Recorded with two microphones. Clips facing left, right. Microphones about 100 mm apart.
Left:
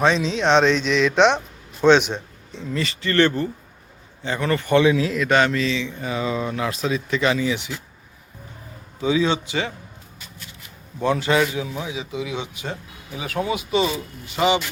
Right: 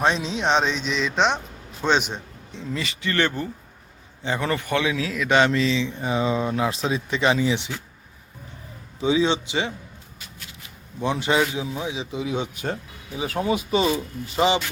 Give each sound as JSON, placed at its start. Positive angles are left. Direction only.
{"t": 0.2, "sound": "speech", "side_deg": -10}
{"t": 1.1, "sound": "speech", "side_deg": 0}
{"t": 4.2, "sound": "speech", "side_deg": -20}
{"t": 4.6, "sound": "speech", "side_deg": 0}
{"t": 5.3, "sound": "speech", "side_deg": -20}
{"t": 9.0, "sound": "speech", "side_deg": -25}
{"t": 11.0, "sound": "speech", "side_deg": -20}
{"t": 13.1, "sound": "speech", "side_deg": -30}